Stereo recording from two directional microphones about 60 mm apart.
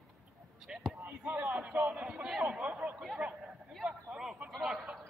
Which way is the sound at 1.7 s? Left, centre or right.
Right.